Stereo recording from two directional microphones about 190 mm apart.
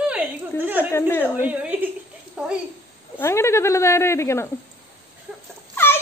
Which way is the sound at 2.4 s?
5° right (ahead or behind).